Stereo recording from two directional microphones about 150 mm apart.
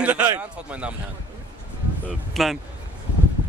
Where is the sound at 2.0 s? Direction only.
Centre (ahead or behind).